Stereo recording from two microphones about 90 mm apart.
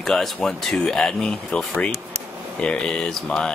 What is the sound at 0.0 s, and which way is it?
Speech, 5° left (ahead or behind).